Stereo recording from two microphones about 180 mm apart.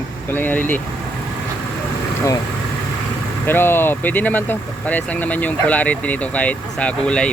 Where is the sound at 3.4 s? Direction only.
10° left (ahead or behind).